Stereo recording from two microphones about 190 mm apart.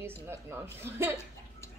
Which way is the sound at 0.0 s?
15° right (ahead or behind).